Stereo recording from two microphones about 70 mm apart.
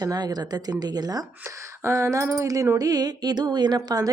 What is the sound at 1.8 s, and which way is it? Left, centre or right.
A woman's voice, right.